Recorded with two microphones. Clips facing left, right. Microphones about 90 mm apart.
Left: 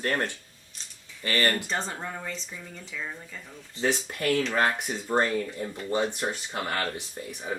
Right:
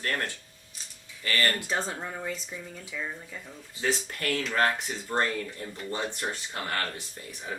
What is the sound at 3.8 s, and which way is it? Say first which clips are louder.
Speech: left 3 dB; 20° left (ahead or behind).